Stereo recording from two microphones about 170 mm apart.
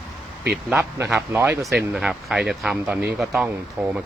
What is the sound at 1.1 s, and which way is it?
Speech, 10° right (ahead or behind).